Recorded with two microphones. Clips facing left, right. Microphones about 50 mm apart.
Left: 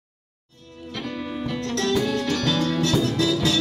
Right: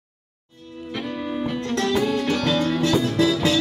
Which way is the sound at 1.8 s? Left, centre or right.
Right.